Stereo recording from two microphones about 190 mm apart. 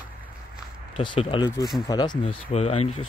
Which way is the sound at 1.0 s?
25° left (ahead or behind).